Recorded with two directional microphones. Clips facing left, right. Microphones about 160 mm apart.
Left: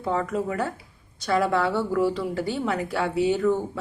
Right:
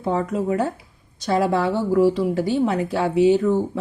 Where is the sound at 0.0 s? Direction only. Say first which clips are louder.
Right 3 dB; 25° right (ahead or behind).